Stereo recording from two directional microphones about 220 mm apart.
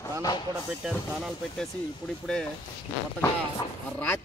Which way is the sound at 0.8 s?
5° right (ahead or behind).